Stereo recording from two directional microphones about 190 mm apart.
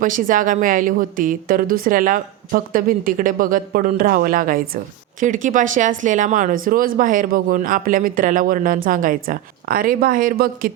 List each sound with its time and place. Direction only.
0.0 s speech: 45° right (ahead or behind)